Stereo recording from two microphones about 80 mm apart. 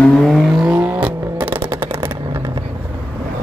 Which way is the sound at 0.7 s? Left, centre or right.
Right.